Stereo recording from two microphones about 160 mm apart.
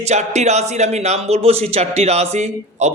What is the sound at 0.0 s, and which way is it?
Speech, 45° right (ahead or behind).